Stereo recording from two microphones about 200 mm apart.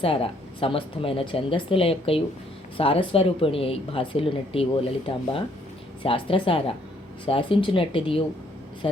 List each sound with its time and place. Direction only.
0.0 s speech: 25° left (ahead or behind)